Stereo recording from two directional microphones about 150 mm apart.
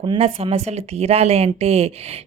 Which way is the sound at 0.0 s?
35° right (ahead or behind).